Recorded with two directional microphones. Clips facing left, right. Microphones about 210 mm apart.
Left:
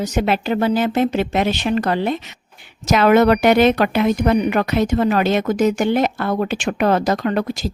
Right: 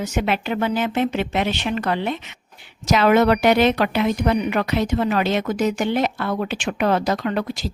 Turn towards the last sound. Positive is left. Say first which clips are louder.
# left 3 dB
turn(degrees=45)  # may be behind; listen again after turning